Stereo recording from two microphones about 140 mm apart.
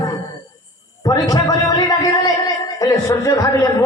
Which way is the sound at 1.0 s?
30° left (ahead or behind).